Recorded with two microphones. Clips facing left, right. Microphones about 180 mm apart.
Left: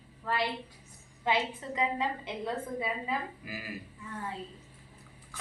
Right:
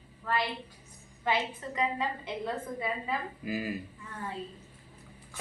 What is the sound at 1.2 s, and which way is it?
A woman's voice, 20° left (ahead or behind).